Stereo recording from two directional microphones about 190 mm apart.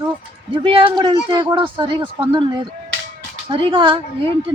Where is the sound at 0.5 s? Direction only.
25° right (ahead or behind).